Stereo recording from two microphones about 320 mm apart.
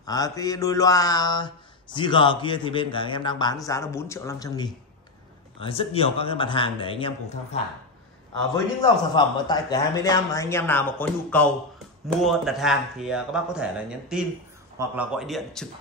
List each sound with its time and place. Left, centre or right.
0.0 s mantra: centre
9.1 s mantra: centre
12.2 s speech: centre